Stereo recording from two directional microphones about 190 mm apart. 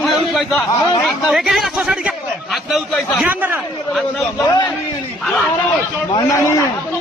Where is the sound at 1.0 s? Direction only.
Centre (ahead or behind).